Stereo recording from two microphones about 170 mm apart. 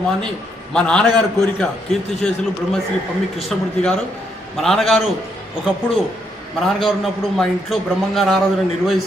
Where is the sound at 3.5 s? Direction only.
5° left (ahead or behind).